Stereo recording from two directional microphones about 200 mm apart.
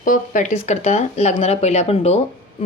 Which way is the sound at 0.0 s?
40° left (ahead or behind).